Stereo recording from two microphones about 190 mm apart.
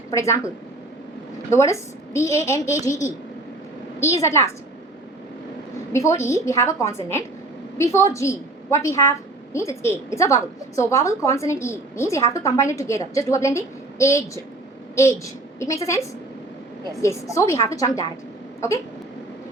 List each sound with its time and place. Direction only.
0.1 s a woman's voice: 15° left (ahead or behind)
5.9 s a woman's voice: 15° left (ahead or behind)
17.0 s a woman's voice: 15° left (ahead or behind)